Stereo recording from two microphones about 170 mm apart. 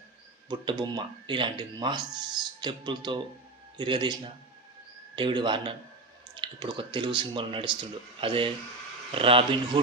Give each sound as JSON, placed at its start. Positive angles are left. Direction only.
{"t": 0.4, "sound": "speech", "side_deg": -25}